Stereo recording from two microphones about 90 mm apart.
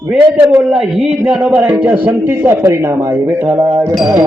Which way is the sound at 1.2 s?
15° right (ahead or behind).